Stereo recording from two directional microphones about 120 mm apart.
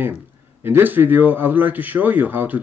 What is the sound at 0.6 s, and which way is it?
A man's voice, 15° right (ahead or behind).